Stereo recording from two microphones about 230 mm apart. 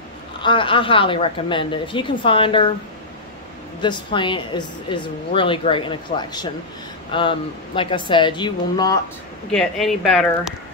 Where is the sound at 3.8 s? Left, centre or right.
Centre.